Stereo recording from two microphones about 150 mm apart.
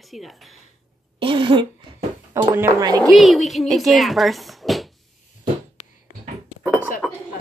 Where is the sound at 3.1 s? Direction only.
Centre (ahead or behind).